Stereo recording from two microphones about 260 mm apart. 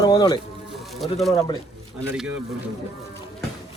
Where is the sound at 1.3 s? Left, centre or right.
Centre.